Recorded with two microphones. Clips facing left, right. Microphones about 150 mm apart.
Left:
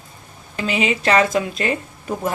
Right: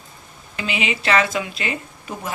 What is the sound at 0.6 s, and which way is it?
Speech, 40° left (ahead or behind).